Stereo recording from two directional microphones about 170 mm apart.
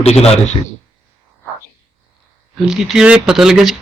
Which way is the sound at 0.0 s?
35° left (ahead or behind).